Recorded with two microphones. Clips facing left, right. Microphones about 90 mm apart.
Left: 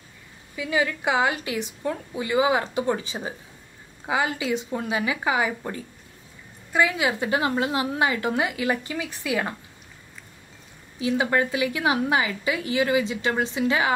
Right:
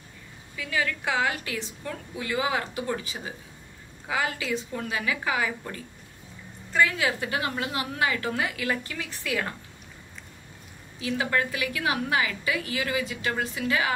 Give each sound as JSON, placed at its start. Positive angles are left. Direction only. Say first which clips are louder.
{"t": 0.6, "sound": "a woman's voice", "louder": "left 4 dB", "side_deg": 20}
{"t": 6.7, "sound": "a woman's voice", "louder": "left 2 dB", "side_deg": 15}
{"t": 11.0, "sound": "a woman's voice", "louder": "left 4 dB", "side_deg": 20}